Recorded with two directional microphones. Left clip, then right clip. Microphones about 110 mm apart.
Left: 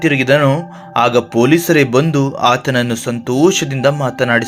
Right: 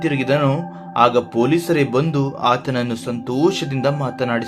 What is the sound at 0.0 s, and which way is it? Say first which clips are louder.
Speech: left 6 dB; 35° left (ahead or behind).